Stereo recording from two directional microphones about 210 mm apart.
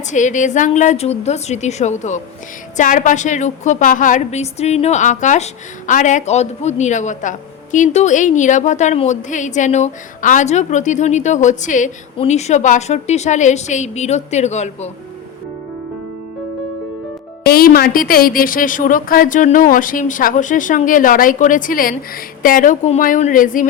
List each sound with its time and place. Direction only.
0.1 s speech: 35° left (ahead or behind)
17.4 s speech: 45° left (ahead or behind)